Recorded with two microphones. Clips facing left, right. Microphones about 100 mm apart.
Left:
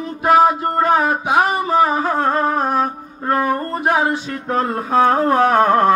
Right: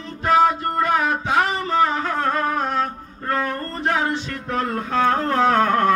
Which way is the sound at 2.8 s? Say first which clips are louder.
Left 4 dB; 15° left (ahead or behind).